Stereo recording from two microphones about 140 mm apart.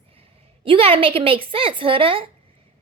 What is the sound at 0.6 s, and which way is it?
A woman's voice, 40° right (ahead or behind).